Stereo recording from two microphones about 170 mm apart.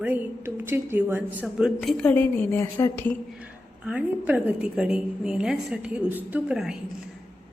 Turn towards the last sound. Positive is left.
turn(degrees=-5)  # may be behind; listen again after turning